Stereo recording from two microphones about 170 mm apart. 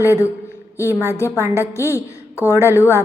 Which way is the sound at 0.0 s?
15° left (ahead or behind).